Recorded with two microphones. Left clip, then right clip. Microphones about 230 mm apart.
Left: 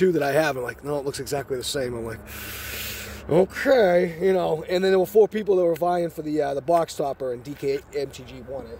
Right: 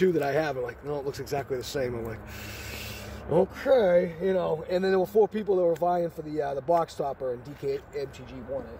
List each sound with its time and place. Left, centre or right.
0.0 s a man's voice: left
3.3 s speech: left